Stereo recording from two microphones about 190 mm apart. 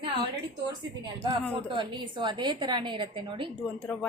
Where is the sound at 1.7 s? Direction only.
25° right (ahead or behind).